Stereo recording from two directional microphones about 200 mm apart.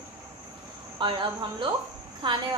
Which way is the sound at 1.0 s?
25° right (ahead or behind).